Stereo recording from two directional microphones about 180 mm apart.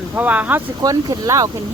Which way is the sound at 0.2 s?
10° right (ahead or behind).